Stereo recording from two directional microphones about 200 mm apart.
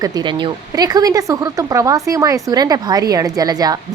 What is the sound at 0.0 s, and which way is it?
Speech, 20° right (ahead or behind).